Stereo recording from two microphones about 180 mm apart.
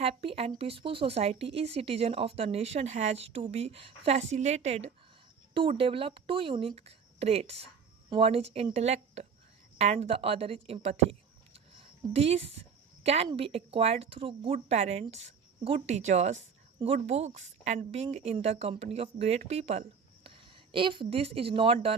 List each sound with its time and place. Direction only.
0.0 s speech: 35° right (ahead or behind)